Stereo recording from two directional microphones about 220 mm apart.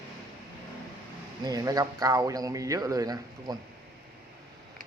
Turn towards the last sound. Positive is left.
turn(degrees=-15)  # may be behind; listen again after turning